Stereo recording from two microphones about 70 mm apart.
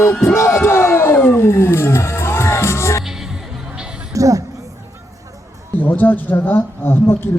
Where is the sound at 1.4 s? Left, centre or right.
Left.